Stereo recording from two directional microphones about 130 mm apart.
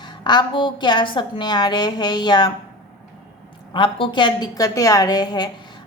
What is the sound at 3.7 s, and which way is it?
A woman's voice, 40° left (ahead or behind).